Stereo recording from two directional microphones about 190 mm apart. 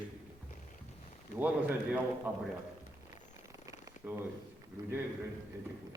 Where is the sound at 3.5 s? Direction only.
15° right (ahead or behind).